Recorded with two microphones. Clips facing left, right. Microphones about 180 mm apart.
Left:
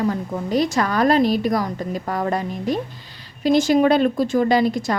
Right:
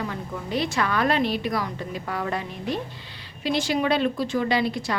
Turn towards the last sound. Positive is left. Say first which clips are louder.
# left 6 dB
turn(degrees=45)  # may be behind; listen again after turning